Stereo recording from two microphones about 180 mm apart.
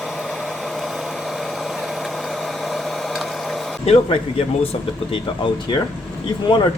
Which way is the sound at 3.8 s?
35° left (ahead or behind).